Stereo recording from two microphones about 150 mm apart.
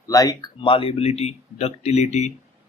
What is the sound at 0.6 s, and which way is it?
Speech, 35° left (ahead or behind).